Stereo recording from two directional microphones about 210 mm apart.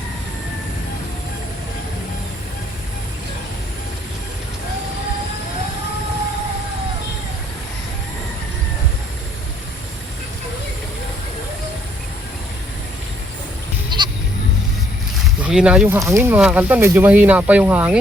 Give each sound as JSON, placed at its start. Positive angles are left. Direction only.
{"t": 13.9, "sound": "goat", "side_deg": -20}
{"t": 15.4, "sound": "speech", "side_deg": -5}